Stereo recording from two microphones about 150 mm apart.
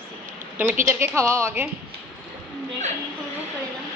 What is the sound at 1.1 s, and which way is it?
Speech, 20° right (ahead or behind).